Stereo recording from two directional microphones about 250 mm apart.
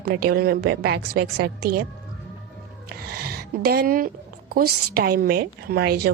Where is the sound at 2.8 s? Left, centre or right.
Right.